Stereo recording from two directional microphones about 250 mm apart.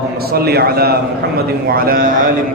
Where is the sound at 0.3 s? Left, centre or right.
Right.